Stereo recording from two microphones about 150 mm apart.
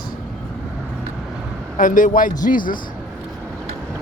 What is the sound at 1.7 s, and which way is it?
A man's voice, 65° left (ahead or behind).